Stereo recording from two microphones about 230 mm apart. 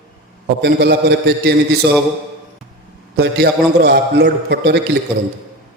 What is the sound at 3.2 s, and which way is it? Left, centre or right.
A man's voice, right.